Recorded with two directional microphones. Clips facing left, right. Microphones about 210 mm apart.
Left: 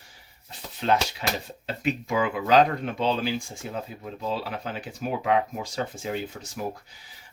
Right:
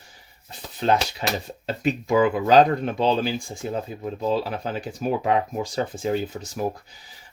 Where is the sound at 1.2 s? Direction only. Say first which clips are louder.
Right 4 dB; 40° right (ahead or behind).